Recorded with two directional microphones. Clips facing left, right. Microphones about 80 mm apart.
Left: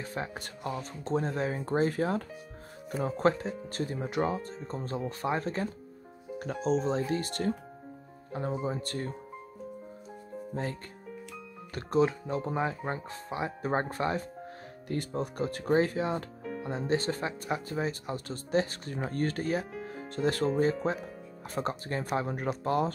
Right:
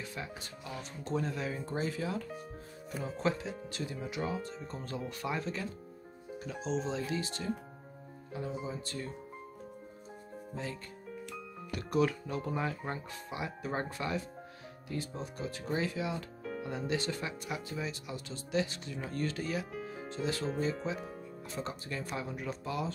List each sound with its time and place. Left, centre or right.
0.0 s speech: left
10.5 s speech: left
11.7 s speech: left
14.9 s speech: left